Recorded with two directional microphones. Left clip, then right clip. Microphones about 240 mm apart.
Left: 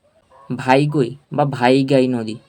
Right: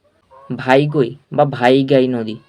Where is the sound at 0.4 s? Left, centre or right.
Centre.